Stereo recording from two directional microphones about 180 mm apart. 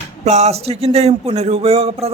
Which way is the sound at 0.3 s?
40° right (ahead or behind).